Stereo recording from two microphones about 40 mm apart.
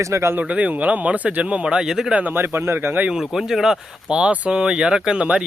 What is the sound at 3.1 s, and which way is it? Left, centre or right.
Speech, centre.